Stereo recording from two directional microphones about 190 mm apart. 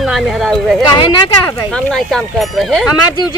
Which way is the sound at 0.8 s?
25° left (ahead or behind).